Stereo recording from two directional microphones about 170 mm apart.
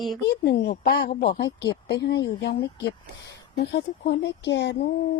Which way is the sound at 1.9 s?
90° left.